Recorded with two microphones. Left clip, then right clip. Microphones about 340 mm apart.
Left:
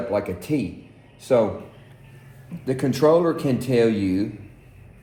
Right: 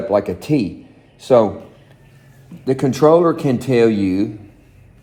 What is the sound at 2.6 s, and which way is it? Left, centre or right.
Speech, right.